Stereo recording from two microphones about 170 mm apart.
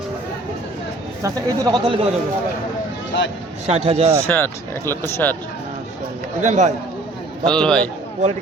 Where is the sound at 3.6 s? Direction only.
35° right (ahead or behind).